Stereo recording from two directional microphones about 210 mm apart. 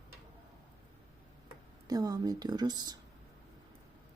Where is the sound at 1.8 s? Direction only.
15° right (ahead or behind).